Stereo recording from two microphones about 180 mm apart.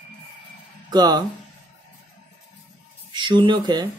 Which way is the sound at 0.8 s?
25° right (ahead or behind).